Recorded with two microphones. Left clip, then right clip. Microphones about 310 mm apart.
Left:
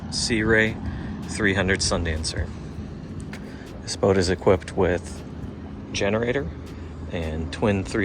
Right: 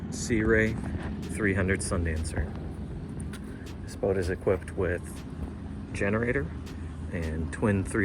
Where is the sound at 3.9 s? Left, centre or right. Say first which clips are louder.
Left 8 dB; left.